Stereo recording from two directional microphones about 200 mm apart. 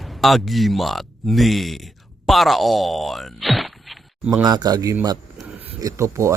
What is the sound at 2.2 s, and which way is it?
Speech, centre (ahead or behind).